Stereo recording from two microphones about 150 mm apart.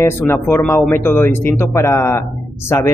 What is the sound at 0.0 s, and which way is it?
Speech, 15° left (ahead or behind).